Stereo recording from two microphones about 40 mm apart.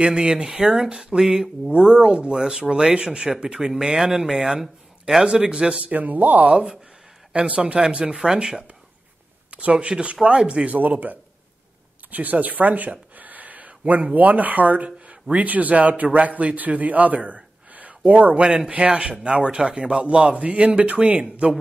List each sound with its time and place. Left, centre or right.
0.0 s a man's voice: centre
1.7 s a man's voice: right
5.2 s a man's voice: right
5.9 s speech: right
6.5 s a man's voice: centre
7.3 s a man's voice: right
8.1 s a man's voice: centre
9.5 s a man's voice: right
10.7 s speech: right
17.6 s a sound: right
18.1 s a man's voice: right
21.2 s a man's voice: right